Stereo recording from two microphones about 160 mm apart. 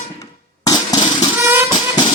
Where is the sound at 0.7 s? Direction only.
25° left (ahead or behind).